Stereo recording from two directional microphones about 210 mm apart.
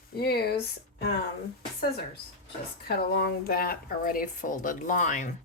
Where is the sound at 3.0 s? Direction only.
50° left (ahead or behind).